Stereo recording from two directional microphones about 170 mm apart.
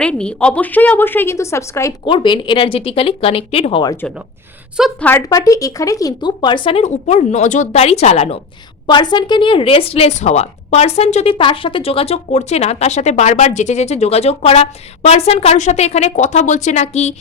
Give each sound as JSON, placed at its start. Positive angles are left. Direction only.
{"t": 0.0, "sound": "a woman's voice", "side_deg": 5}
{"t": 2.0, "sound": "a woman's voice", "side_deg": 30}
{"t": 4.8, "sound": "speech", "side_deg": 10}
{"t": 8.9, "sound": "a woman's voice", "side_deg": 25}